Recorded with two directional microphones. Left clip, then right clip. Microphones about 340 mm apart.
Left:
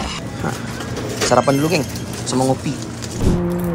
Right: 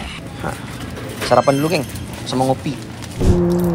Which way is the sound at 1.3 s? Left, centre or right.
Centre.